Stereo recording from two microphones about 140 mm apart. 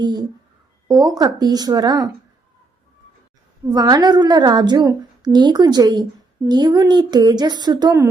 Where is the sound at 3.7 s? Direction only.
30° right (ahead or behind).